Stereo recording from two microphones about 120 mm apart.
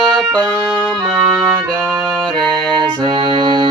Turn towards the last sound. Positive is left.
turn(degrees=-40)  # may be behind; listen again after turning